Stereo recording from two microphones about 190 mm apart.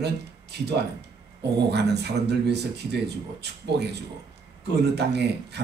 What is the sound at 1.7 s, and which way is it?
Speech, 60° right (ahead or behind).